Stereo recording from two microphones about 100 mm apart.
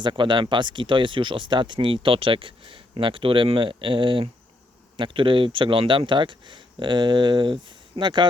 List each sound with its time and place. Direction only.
0.0 s speech: 50° right (ahead or behind)